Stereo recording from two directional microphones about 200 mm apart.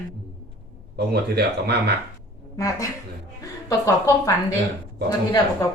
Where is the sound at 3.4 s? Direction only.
15° left (ahead or behind).